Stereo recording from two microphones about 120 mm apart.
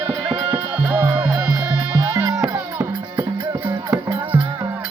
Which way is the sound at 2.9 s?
40° right (ahead or behind).